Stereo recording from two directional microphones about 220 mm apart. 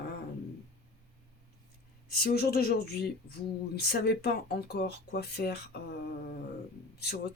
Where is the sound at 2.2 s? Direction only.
45° left (ahead or behind).